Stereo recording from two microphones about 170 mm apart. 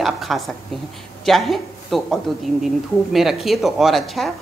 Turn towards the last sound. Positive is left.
turn(degrees=0)  # may be behind; listen again after turning